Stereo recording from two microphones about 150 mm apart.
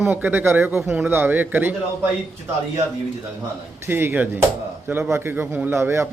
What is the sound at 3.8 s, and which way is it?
A man's voice, 15° right (ahead or behind).